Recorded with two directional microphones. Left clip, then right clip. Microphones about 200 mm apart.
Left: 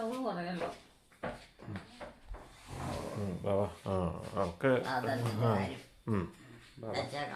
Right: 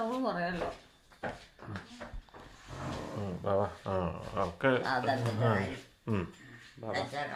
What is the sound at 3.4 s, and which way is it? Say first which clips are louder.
Speech: right 2 dB; 15° left (ahead or behind).